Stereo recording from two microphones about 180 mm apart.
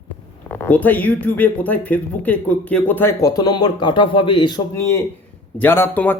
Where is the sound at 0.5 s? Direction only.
10° left (ahead or behind).